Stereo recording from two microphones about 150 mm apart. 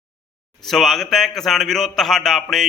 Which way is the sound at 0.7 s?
Centre (ahead or behind).